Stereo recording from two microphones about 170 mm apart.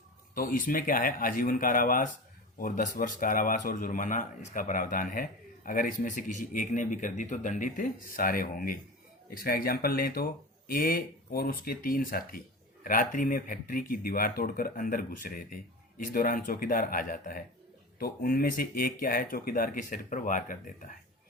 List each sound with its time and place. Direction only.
0.3 s speech: 55° left (ahead or behind)